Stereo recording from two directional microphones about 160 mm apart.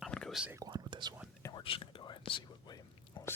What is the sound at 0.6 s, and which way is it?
Whispering, 30° right (ahead or behind).